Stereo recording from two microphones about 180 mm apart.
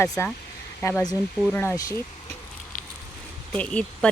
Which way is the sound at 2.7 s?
50° left (ahead or behind).